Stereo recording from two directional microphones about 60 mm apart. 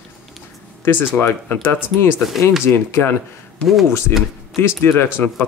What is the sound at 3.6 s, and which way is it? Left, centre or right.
Speech, centre.